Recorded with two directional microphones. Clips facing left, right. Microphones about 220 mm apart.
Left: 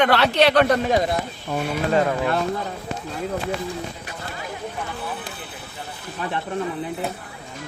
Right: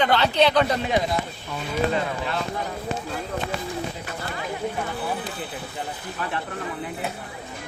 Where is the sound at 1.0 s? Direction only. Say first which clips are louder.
Left 2 dB; 55° left (ahead or behind).